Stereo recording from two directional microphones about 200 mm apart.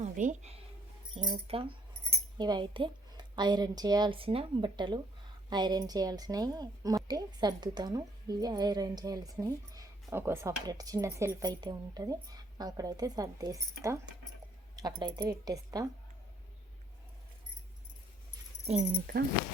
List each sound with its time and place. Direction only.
0.0 s speech: 35° right (ahead or behind)
1.1 s a woman's voice: 25° right (ahead or behind)